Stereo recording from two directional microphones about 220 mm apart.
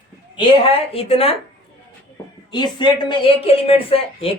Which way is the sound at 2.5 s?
20° left (ahead or behind).